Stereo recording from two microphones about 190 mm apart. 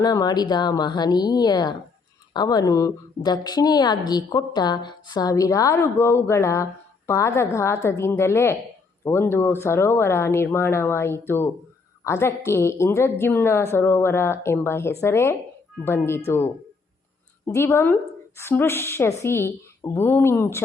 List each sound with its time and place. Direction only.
0.0 s a woman's voice: 20° left (ahead or behind)